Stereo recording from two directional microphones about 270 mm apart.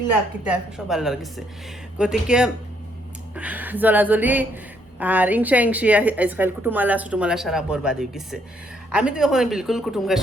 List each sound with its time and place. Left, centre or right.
0.4 s speech: centre